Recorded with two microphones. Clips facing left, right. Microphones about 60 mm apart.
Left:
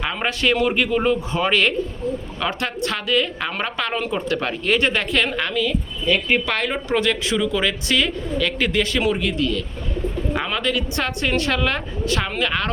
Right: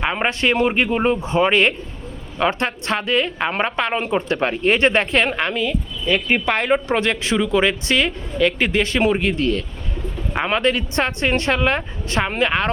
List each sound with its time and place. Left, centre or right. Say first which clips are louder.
0.0 s a woman's voice: right 2 dB; right